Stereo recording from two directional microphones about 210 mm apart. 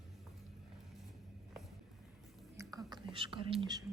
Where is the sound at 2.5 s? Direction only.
15° right (ahead or behind).